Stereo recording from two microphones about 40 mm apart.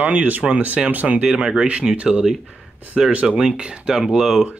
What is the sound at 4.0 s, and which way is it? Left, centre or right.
Speech, centre.